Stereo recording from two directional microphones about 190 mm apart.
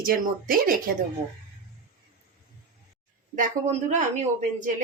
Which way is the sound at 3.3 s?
40° right (ahead or behind).